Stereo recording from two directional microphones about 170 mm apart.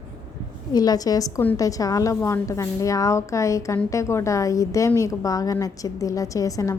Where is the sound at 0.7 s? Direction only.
20° left (ahead or behind).